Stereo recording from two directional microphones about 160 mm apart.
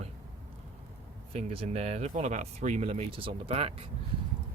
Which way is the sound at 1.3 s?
40° right (ahead or behind).